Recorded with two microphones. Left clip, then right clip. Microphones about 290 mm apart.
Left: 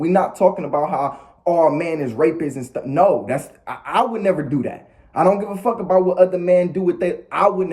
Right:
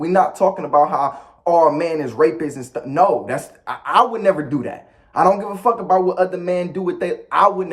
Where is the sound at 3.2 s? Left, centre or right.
Centre.